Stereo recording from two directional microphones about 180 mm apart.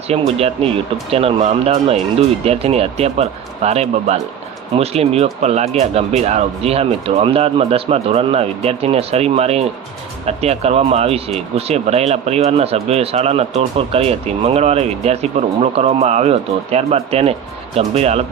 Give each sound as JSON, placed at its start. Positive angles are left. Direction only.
{"t": 0.1, "sound": "speech", "side_deg": -35}